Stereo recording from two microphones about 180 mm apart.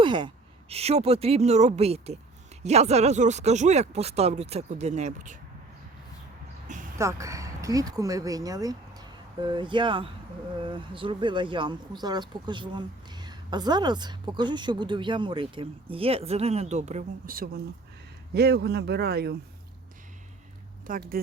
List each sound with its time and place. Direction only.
0.0 s a woman's voice: 25° right (ahead or behind); by 5.4 s 40° right (ahead or behind)
6.7 s a sound: 45° right (ahead or behind)
7.0 s speech: 15° right (ahead or behind); by 17.3 s 40° right (ahead or behind)
17.3 s speech: 55° right (ahead or behind)
20.9 s speech: 50° right (ahead or behind)